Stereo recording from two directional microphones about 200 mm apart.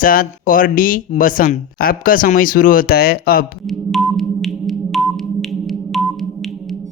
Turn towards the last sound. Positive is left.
turn(degrees=0)  # may be behind; listen again after turning